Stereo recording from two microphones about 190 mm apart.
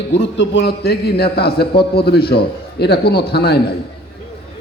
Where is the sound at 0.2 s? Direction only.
65° left (ahead or behind).